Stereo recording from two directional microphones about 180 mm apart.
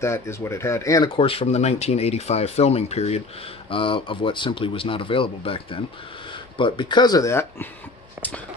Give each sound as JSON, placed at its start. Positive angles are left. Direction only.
{"t": 0.0, "sound": "speech", "side_deg": 15}
{"t": 1.1, "sound": "speech", "side_deg": 30}